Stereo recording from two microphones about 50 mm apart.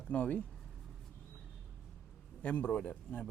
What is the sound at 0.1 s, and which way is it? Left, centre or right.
Speech, left.